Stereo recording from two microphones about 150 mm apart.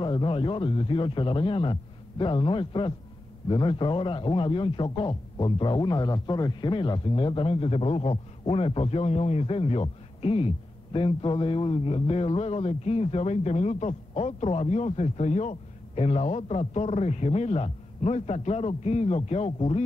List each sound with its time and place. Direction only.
0.0 s a man's voice: 35° left (ahead or behind)